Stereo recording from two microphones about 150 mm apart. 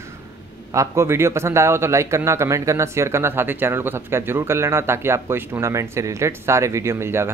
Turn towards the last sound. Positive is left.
turn(degrees=-15)  # may be behind; listen again after turning